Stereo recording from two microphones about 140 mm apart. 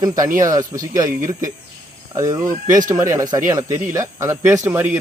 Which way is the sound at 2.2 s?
25° right (ahead or behind).